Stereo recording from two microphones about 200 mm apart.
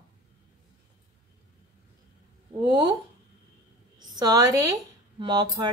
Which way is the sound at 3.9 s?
20° right (ahead or behind).